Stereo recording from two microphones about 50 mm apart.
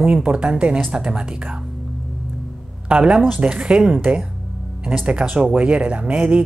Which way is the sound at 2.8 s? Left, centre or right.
Right.